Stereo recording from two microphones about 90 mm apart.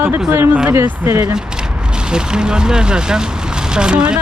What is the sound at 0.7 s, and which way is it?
Speech, 35° right (ahead or behind).